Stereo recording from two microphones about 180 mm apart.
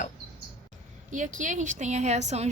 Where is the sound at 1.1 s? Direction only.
45° right (ahead or behind).